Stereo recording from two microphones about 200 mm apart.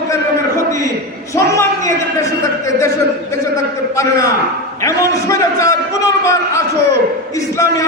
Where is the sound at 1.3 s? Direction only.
15° left (ahead or behind).